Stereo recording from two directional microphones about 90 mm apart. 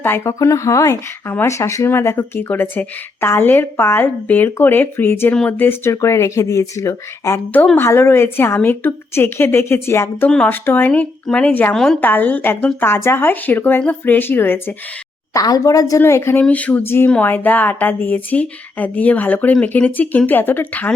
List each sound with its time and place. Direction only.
0.0 s speech: 25° left (ahead or behind)
0.3 s speech: 35° left (ahead or behind)
10.2 s speech: 10° left (ahead or behind)
15.3 s speech: 40° left (ahead or behind)
16.4 s speech: 15° left (ahead or behind)
16.8 s speech: 25° left (ahead or behind)